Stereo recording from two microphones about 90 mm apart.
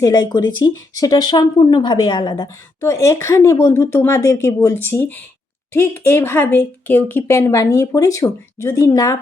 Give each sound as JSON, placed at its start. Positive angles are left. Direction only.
{"t": 0.0, "sound": "speech", "side_deg": 45}
{"t": 2.8, "sound": "a woman's voice", "side_deg": 35}